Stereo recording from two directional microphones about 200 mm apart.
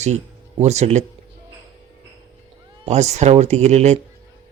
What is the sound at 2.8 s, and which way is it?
Speech, 35° right (ahead or behind).